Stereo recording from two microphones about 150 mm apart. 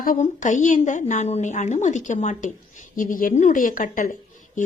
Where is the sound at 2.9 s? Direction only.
65° left (ahead or behind).